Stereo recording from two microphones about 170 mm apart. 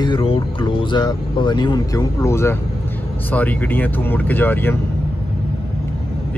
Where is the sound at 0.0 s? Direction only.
30° left (ahead or behind); by 4.7 s 10° left (ahead or behind).